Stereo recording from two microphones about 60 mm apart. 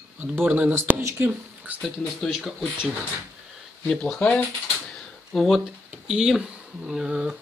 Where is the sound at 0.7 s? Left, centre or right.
Right.